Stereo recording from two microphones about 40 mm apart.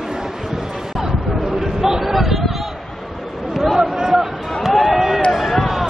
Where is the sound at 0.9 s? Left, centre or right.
Centre.